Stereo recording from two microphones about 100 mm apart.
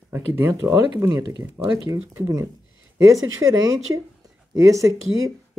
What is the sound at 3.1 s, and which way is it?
Speech, 35° right (ahead or behind).